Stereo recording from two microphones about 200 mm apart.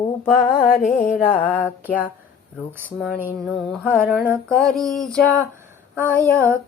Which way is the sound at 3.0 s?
Centre (ahead or behind).